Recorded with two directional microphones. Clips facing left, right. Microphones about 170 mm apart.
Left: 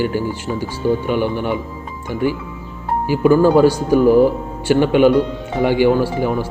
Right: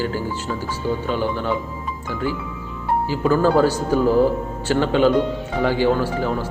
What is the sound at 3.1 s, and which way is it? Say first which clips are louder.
A man's voice: left 6 dB; 15° left (ahead or behind).